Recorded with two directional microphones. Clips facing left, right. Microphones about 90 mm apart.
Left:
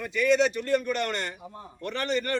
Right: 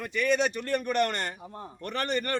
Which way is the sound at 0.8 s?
45° right (ahead or behind).